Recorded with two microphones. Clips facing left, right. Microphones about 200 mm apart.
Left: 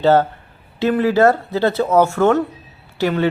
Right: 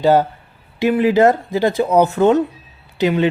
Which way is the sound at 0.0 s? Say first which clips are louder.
Even; 15° right (ahead or behind).